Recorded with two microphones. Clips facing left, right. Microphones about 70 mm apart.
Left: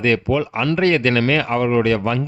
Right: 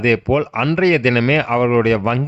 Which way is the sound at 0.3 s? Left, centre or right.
Right.